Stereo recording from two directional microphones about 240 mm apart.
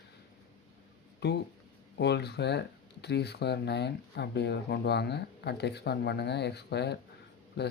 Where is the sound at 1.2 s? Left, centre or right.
Left.